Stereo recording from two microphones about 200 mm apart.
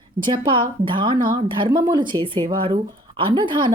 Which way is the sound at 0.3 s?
25° right (ahead or behind).